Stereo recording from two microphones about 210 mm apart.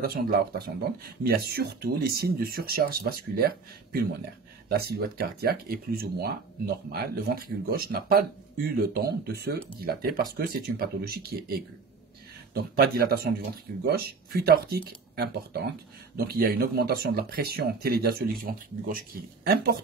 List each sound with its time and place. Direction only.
0.0 s speech: 45° right (ahead or behind)
12.7 s speech: 45° right (ahead or behind)